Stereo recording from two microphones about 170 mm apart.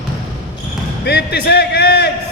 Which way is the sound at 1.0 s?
75° left (ahead or behind).